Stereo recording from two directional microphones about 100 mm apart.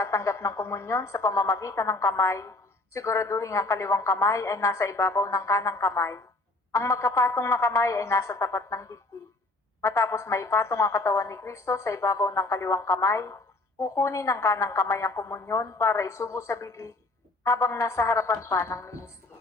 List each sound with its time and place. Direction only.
0.0 s a woman's voice: 30° left (ahead or behind)